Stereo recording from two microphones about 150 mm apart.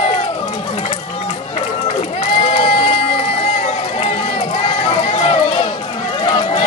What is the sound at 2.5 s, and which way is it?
Crowd, 40° left (ahead or behind).